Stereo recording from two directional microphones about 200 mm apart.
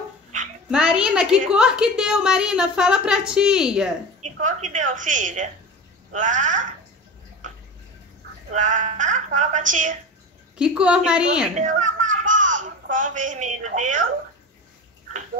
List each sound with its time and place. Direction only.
0.7 s a woman's voice: 5° right (ahead or behind)
4.2 s speech: 35° right (ahead or behind)
8.5 s speech: 40° right (ahead or behind)
10.6 s a woman's voice: 5° right (ahead or behind)
11.5 s a woman's voice: 40° right (ahead or behind)